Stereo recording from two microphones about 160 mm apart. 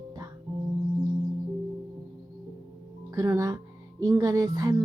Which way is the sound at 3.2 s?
20° right (ahead or behind).